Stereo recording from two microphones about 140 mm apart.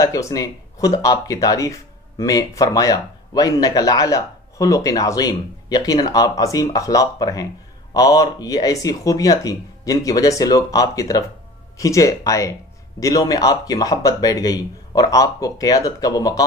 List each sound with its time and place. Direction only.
0.0 s speech: 25° left (ahead or behind)